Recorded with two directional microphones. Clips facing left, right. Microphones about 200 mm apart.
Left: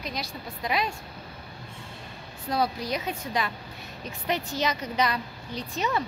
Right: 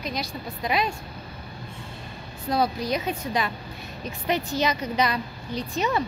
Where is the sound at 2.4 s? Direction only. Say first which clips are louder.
Right 3 dB; 25° right (ahead or behind).